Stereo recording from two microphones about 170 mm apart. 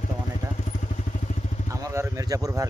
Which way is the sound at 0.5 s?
45° left (ahead or behind).